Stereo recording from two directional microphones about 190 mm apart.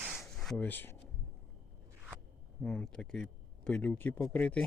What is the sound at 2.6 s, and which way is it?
Speech, 5° left (ahead or behind).